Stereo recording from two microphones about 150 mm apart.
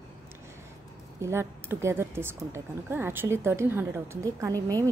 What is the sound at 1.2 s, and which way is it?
A woman's voice, 15° right (ahead or behind).